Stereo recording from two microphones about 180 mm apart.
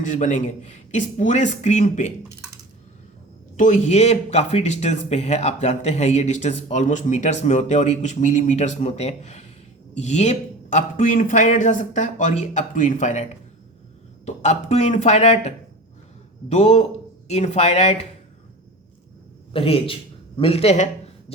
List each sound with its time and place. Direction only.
0.0 s speech: 45° left (ahead or behind)
3.6 s speech: 40° left (ahead or behind)
14.3 s speech: 40° left (ahead or behind)
19.5 s a man's voice: 30° left (ahead or behind)